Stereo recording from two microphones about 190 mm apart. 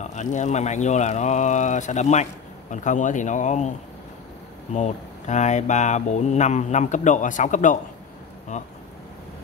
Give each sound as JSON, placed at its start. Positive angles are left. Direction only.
{"t": 0.0, "sound": "speech", "side_deg": 40}
{"t": 4.7, "sound": "speech", "side_deg": 40}